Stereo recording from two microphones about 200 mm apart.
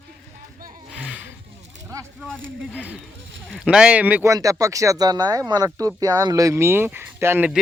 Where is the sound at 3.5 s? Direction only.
Centre (ahead or behind).